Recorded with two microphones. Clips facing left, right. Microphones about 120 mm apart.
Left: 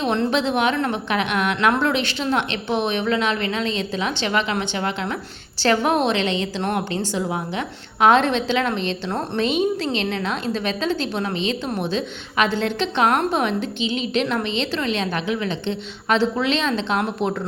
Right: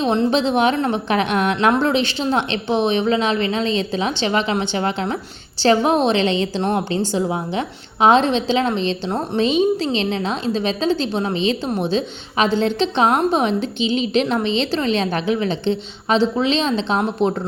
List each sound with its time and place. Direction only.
0.0 s a woman's voice: 25° right (ahead or behind)